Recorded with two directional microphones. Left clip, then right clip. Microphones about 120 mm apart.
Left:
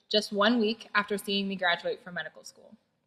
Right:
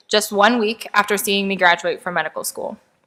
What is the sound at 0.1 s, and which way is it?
A woman's voice, 40° right (ahead or behind).